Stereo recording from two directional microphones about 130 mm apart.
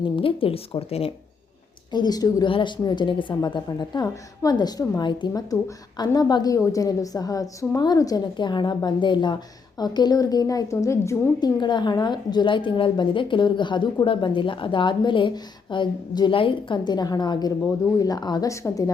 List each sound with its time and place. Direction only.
0.0 s speech: 45° left (ahead or behind)
1.9 s a woman's voice: 35° left (ahead or behind)